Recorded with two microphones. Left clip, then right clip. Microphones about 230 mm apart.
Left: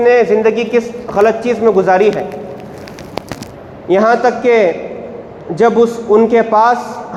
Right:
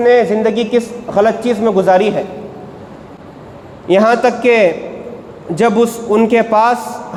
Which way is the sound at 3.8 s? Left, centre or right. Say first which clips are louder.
Even; right.